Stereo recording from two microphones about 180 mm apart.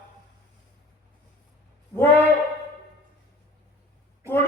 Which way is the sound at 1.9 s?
10° left (ahead or behind).